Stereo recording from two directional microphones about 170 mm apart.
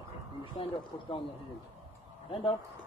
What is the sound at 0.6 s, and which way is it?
Speech, 30° left (ahead or behind).